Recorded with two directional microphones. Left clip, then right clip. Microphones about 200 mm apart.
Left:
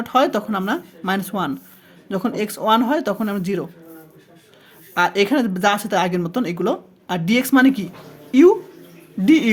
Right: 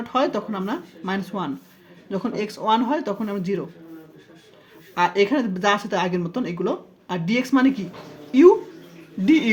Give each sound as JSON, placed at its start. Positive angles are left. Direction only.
{"t": 0.0, "sound": "speech", "side_deg": 35}
{"t": 4.9, "sound": "speech", "side_deg": 35}